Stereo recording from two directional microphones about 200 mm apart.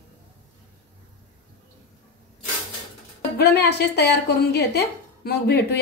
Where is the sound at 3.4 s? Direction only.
55° left (ahead or behind).